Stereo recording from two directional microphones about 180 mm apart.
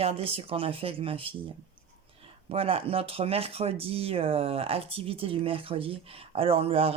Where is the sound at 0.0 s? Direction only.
35° right (ahead or behind).